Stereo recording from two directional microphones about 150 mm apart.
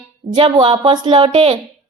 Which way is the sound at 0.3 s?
30° right (ahead or behind).